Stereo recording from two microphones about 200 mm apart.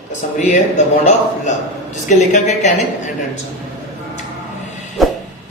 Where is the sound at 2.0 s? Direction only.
35° left (ahead or behind).